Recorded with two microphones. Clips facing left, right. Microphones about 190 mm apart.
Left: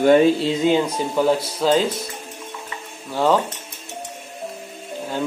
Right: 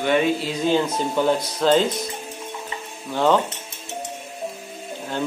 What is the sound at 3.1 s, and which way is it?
Speech, 5° left (ahead or behind).